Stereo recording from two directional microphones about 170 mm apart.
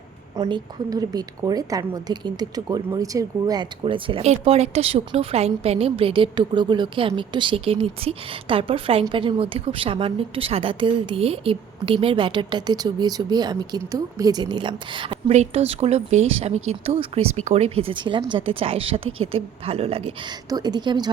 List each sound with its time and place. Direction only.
0.3 s a woman's voice: 25° right (ahead or behind)
15.3 s speech: 40° right (ahead or behind)
20.5 s a woman's voice: 25° right (ahead or behind)